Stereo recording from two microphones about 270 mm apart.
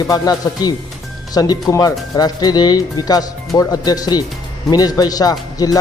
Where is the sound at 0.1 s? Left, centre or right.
Centre.